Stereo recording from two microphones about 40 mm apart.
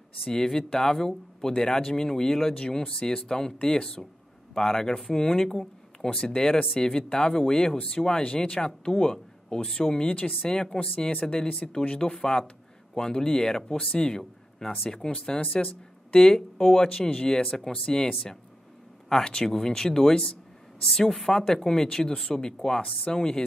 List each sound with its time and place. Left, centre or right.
0.3 s speech: centre
5.5 s a sound: centre
6.2 s speech: centre
10.0 s speech: left
10.5 s speech: centre
15.4 s speech: left
16.2 s speech: centre
22.8 s speech: left